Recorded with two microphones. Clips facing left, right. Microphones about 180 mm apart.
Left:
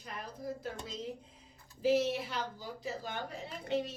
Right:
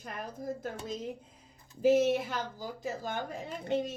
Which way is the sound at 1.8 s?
50° right (ahead or behind).